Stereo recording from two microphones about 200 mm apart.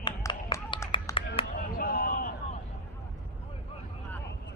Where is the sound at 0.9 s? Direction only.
25° left (ahead or behind).